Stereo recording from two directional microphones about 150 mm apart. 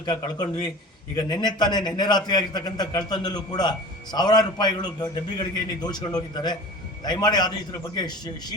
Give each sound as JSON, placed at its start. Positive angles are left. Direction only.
{"t": 0.0, "sound": "a man's voice", "side_deg": 30}